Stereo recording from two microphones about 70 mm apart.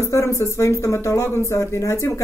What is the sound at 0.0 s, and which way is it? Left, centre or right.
Speech, left.